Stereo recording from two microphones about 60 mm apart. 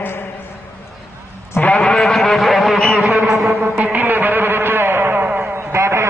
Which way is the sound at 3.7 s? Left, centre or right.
Right.